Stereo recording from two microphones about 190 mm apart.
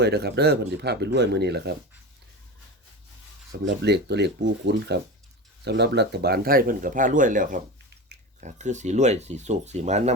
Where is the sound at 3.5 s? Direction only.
70° right (ahead or behind).